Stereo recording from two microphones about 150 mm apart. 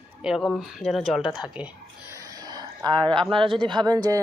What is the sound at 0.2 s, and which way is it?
Speech, 5° right (ahead or behind).